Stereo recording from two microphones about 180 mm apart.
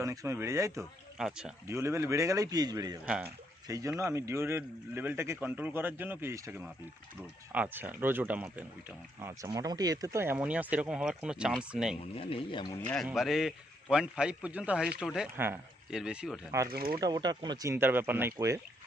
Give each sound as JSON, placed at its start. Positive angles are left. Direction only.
{"t": 0.0, "sound": "speech", "side_deg": -15}
{"t": 1.2, "sound": "a man's voice", "side_deg": -5}
{"t": 1.6, "sound": "speech", "side_deg": -15}
{"t": 12.1, "sound": "speech", "side_deg": 30}
{"t": 13.1, "sound": "a man's voice", "side_deg": 0}
{"t": 16.7, "sound": "speech", "side_deg": -55}
{"t": 17.0, "sound": "speech", "side_deg": -20}